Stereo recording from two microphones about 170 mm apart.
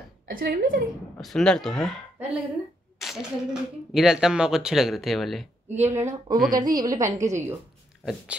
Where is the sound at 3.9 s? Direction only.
5° right (ahead or behind).